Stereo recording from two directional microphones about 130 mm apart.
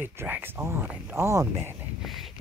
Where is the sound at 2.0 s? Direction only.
Centre (ahead or behind).